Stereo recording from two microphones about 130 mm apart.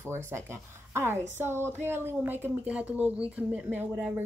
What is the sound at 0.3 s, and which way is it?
A woman's voice, 20° right (ahead or behind).